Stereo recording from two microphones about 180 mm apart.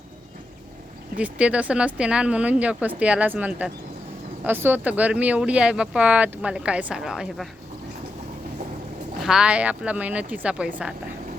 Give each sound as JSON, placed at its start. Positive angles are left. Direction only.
{"t": 1.1, "sound": "speech", "side_deg": -5}
{"t": 9.2, "sound": "speech", "side_deg": -5}